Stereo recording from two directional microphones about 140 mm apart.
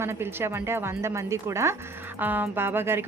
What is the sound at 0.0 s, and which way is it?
Speech, 20° right (ahead or behind).